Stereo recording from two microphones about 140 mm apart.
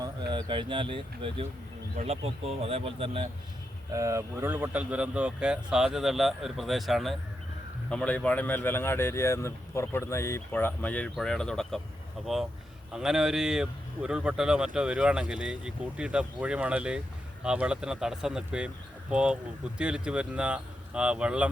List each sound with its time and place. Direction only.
0.0 s speech: 30° right (ahead or behind)
3.9 s speech: 20° right (ahead or behind)